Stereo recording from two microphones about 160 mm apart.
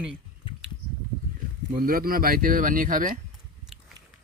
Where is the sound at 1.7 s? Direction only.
65° right (ahead or behind).